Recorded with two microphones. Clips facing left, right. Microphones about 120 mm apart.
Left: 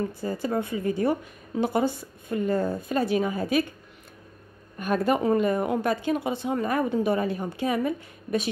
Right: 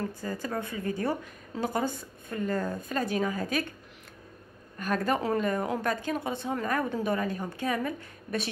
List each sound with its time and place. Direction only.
0.2 s a woman's voice: 20° left (ahead or behind)
2.5 s speech: 25° left (ahead or behind)
2.9 s a woman's voice: 15° left (ahead or behind)
4.7 s a woman's voice: 15° left (ahead or behind)